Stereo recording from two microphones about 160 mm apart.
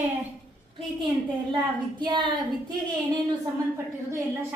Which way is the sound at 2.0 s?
30° right (ahead or behind).